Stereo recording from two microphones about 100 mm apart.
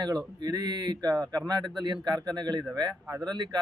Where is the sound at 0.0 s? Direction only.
45° right (ahead or behind).